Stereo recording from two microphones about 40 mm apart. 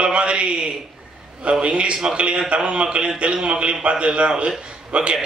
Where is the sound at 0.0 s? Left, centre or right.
Right.